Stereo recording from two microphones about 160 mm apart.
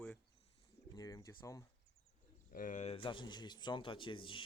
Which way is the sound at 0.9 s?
25° left (ahead or behind).